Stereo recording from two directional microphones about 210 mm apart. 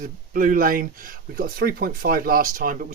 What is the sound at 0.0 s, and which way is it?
Speech, 40° right (ahead or behind).